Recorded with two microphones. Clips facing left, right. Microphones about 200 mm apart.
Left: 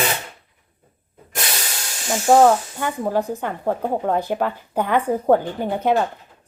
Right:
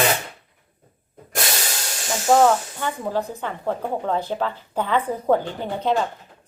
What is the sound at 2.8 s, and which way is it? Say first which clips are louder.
A woman's voice: left 3 dB; 10° left (ahead or behind).